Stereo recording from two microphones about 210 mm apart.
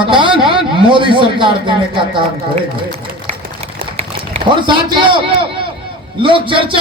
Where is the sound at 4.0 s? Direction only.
25° right (ahead or behind).